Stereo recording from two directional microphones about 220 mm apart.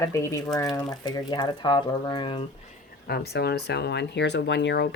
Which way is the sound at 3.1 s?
50° left (ahead or behind).